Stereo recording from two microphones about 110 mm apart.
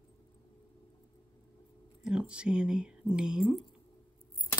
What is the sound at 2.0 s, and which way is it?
Speech, 5° right (ahead or behind).